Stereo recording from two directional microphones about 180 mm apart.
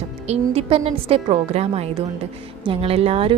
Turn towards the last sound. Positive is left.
turn(degrees=-30)  # may be behind; listen again after turning